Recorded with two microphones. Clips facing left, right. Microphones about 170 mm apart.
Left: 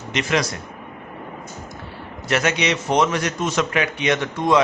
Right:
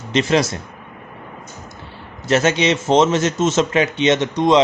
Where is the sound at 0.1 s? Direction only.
30° right (ahead or behind).